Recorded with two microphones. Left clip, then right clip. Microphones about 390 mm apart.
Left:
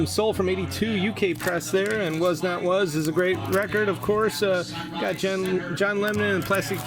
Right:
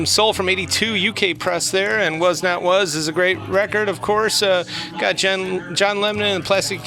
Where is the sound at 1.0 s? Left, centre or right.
Centre.